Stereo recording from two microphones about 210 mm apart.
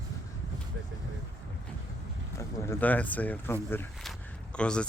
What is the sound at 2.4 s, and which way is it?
Speech, 10° left (ahead or behind).